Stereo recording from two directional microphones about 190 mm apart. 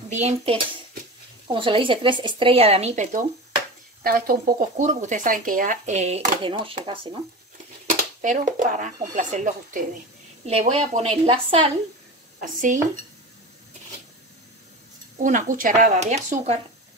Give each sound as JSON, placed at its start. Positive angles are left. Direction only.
{"t": 0.1, "sound": "a woman's voice", "side_deg": -35}
{"t": 1.5, "sound": "speech", "side_deg": -25}
{"t": 6.4, "sound": "speech", "side_deg": -25}
{"t": 7.8, "sound": "a woman's voice", "side_deg": -40}
{"t": 12.4, "sound": "speech", "side_deg": -45}
{"t": 15.1, "sound": "speech", "side_deg": -40}